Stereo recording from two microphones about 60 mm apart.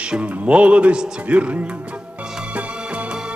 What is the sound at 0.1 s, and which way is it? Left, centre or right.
Speech, right.